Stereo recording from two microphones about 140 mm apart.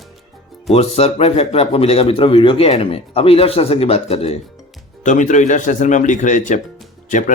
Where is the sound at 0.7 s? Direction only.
50° left (ahead or behind).